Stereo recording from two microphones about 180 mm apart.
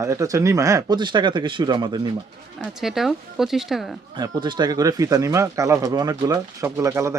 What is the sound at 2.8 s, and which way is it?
Speech, centre (ahead or behind).